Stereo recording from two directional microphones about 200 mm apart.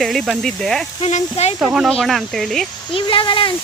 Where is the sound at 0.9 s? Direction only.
30° left (ahead or behind).